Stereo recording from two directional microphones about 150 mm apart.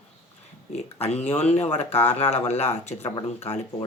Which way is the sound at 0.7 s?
45° left (ahead or behind).